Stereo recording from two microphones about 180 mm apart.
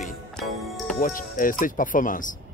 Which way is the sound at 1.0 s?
50° left (ahead or behind).